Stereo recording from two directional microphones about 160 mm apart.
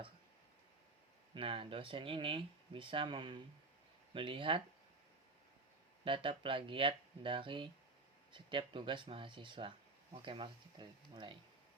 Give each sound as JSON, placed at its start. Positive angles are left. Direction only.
{"t": 1.3, "sound": "speech", "side_deg": -35}
{"t": 6.1, "sound": "speech", "side_deg": -35}